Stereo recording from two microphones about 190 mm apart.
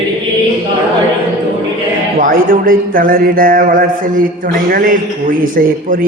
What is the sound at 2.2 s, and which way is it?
Speech, 50° right (ahead or behind).